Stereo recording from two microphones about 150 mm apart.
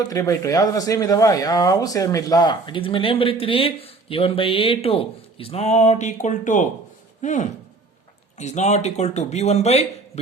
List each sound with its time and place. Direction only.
0.1 s speech: 20° left (ahead or behind); by 9.8 s 45° left (ahead or behind)